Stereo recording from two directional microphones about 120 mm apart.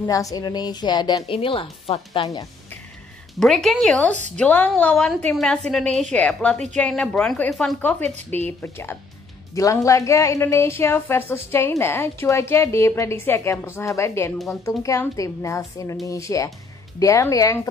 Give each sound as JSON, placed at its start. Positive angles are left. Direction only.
{"t": 0.0, "sound": "a woman's voice", "side_deg": 30}
{"t": 1.3, "sound": "speech", "side_deg": 45}
{"t": 3.3, "sound": "a woman's voice", "side_deg": 0}
{"t": 7.8, "sound": "a woman's voice", "side_deg": 15}